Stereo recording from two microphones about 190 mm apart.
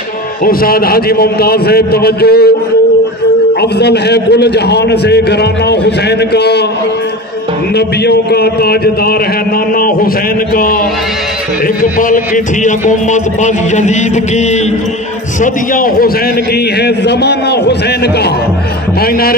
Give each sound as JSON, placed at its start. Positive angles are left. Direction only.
{"t": 0.5, "sound": "a man's voice", "side_deg": 50}
{"t": 3.8, "sound": "a man's voice", "side_deg": 60}
{"t": 7.7, "sound": "a man's voice", "side_deg": 60}
{"t": 9.8, "sound": "a sound", "side_deg": 50}
{"t": 10.5, "sound": "a man's voice", "side_deg": 50}
{"t": 11.8, "sound": "a man's voice", "side_deg": 45}
{"t": 12.6, "sound": "music", "side_deg": 40}
{"t": 15.4, "sound": "a man's voice", "side_deg": 50}
{"t": 16.8, "sound": "a man's voice", "side_deg": 60}